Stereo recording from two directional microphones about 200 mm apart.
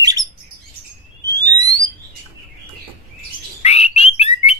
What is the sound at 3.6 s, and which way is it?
Bird, 30° left (ahead or behind).